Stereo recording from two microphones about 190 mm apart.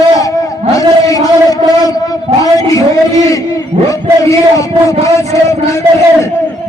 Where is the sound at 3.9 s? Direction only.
15° left (ahead or behind).